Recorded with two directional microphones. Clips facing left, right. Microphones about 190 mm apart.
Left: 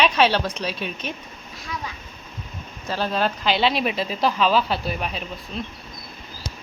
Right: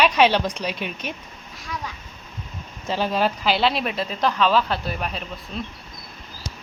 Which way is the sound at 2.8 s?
15° right (ahead or behind).